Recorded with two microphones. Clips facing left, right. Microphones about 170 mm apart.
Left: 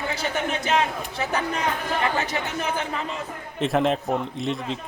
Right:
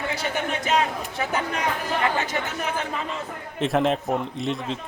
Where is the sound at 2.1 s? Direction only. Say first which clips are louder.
Even; 35° left (ahead or behind).